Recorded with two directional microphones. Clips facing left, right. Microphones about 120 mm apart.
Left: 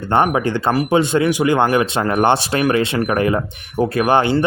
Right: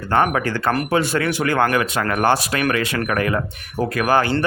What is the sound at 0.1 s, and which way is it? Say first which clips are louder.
Speech: left 2 dB; 20° left (ahead or behind).